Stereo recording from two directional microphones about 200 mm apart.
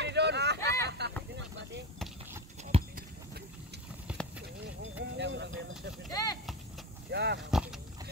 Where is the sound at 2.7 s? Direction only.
30° right (ahead or behind).